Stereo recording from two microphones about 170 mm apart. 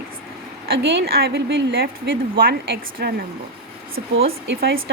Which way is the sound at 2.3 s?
65° right (ahead or behind).